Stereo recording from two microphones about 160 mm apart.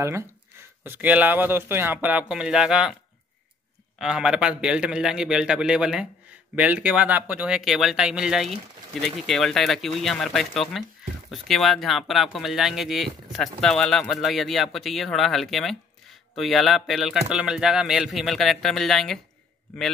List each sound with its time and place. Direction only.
0.8 s speech: 10° right (ahead or behind)
4.0 s speech: 5° right (ahead or behind)